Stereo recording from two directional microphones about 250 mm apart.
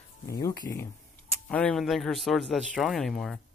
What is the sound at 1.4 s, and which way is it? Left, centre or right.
A man's voice, centre.